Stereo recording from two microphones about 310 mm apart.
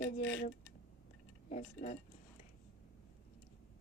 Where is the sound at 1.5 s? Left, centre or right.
Left.